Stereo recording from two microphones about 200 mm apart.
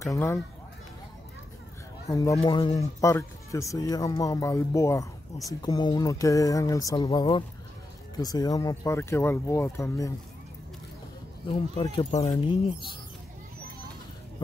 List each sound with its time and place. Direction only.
0.0 s speech: 15° left (ahead or behind)
2.0 s speech: 15° left (ahead or behind)
2.3 s speech: 25° left (ahead or behind)
11.8 s speech: 15° left (ahead or behind)
12.1 s speech: 30° left (ahead or behind)